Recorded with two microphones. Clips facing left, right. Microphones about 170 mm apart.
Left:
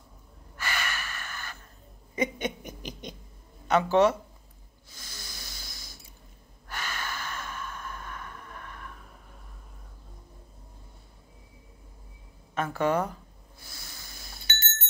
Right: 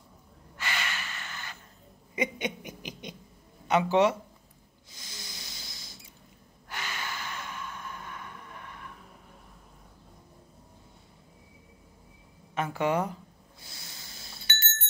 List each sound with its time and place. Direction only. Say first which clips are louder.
0.6 s snort: left 1 dB; 20° right (ahead or behind)
2.1 s owl: left 2 dB; 15° right (ahead or behind)
3.6 s speech: left 2 dB; 15° right (ahead or behind)
4.9 s a sound: even; 20° right (ahead or behind)
6.7 s gasp: left 1 dB; 20° right (ahead or behind)
12.5 s snort: left 1 dB; 15° right (ahead or behind)